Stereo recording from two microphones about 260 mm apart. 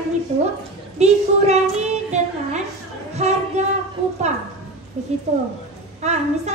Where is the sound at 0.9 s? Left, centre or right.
Right.